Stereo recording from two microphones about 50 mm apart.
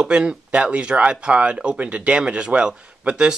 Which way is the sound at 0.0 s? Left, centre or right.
Centre.